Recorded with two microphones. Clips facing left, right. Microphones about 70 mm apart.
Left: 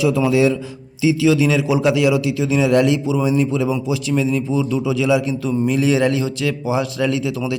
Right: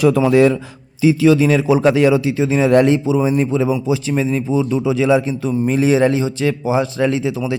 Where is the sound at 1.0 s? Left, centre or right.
Right.